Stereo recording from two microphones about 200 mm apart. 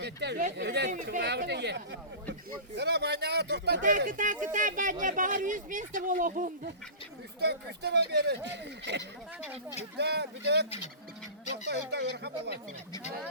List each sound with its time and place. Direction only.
0.0 s speech: 60° right (ahead or behind); by 6.5 s 40° right (ahead or behind)
7.3 s speech: 55° right (ahead or behind)
11.7 s speech: 55° right (ahead or behind)